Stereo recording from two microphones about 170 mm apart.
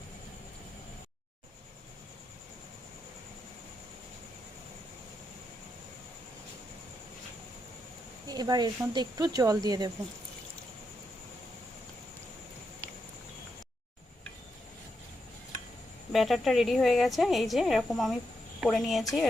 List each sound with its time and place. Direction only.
8.3 s speech: 25° right (ahead or behind)
16.1 s a woman's voice: centre (ahead or behind)